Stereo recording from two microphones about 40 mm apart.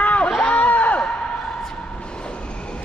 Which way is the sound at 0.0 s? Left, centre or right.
Left.